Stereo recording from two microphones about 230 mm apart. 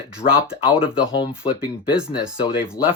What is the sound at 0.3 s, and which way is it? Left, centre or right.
Speech, centre.